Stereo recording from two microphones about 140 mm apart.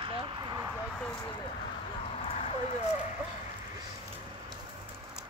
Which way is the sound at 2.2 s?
50° left (ahead or behind).